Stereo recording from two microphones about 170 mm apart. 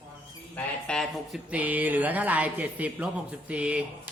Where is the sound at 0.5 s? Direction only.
5° left (ahead or behind).